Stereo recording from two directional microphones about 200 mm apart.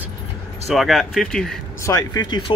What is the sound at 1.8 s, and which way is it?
Speech, 15° left (ahead or behind).